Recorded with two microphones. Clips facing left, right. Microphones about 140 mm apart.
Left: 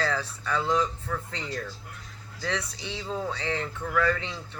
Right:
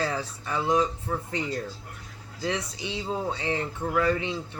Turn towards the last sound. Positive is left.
turn(degrees=-20)  # may be behind; listen again after turning